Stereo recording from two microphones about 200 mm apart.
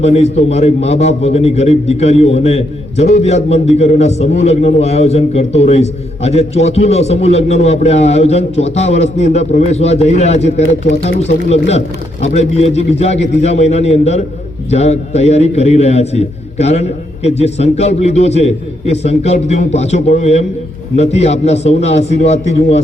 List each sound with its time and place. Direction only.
0.0 s a man's voice: 35° left (ahead or behind)